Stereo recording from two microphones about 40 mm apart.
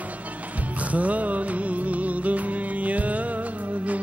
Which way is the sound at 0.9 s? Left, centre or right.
Right.